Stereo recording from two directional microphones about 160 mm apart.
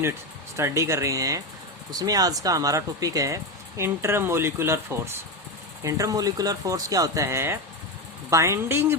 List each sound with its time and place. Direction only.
0.5 s speech: 15° right (ahead or behind)